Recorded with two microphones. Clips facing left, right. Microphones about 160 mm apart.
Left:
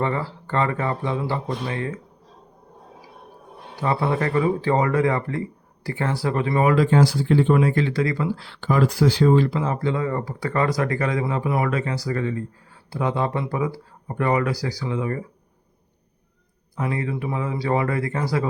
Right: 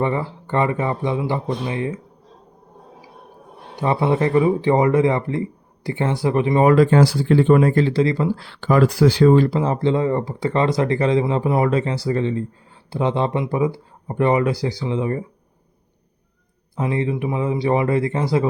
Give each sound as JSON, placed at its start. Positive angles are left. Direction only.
{"t": 0.0, "sound": "speech", "side_deg": -20}
{"t": 3.8, "sound": "speech", "side_deg": -20}
{"t": 6.7, "sound": "speech", "side_deg": -70}
{"t": 8.4, "sound": "speech", "side_deg": -60}
{"t": 9.4, "sound": "speech", "side_deg": -35}
{"t": 16.7, "sound": "speech", "side_deg": -25}